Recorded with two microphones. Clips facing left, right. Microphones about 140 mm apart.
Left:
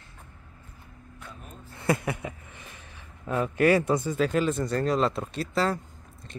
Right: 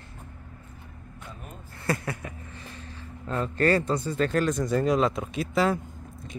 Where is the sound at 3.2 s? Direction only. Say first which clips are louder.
Left 2 dB; 10° left (ahead or behind).